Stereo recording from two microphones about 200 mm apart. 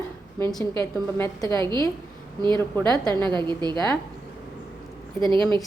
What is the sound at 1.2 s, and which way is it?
Speech, 15° left (ahead or behind).